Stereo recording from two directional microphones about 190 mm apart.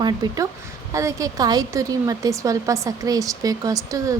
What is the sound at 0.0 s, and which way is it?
Speech, 20° right (ahead or behind).